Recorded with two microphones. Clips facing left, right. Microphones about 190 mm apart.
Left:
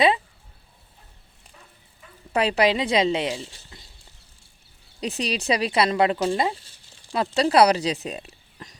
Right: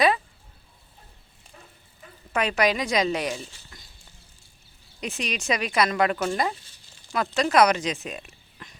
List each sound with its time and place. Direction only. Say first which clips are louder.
2.3 s a woman's voice: left 3 dB; 30° left (ahead or behind)
4.9 s speech: left 4 dB; 35° left (ahead or behind)